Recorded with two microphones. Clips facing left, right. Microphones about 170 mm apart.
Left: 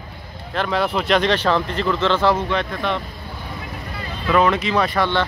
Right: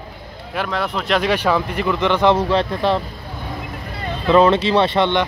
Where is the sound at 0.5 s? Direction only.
5° right (ahead or behind).